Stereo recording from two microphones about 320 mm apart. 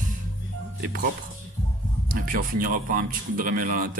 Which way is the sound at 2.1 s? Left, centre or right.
Right.